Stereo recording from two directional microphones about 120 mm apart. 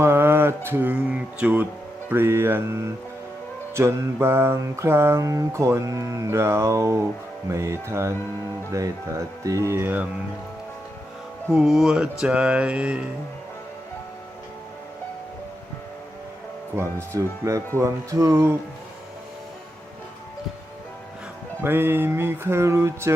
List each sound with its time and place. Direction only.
0.0 s mantra: 20° right (ahead or behind)
11.5 s speech: centre (ahead or behind)
12.2 s music: 10° right (ahead or behind)
16.7 s mantra: 25° right (ahead or behind)
21.6 s mantra: 20° right (ahead or behind)